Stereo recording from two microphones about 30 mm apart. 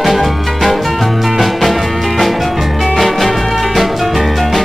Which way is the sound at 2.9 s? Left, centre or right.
Centre.